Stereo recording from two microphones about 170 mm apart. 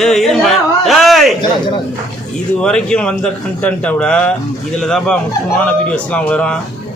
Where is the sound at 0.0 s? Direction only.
Centre (ahead or behind).